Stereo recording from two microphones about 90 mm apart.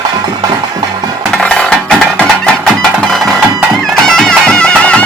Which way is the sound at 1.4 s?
5° left (ahead or behind).